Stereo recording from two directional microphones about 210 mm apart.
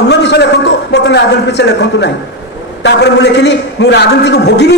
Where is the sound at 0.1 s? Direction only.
55° left (ahead or behind).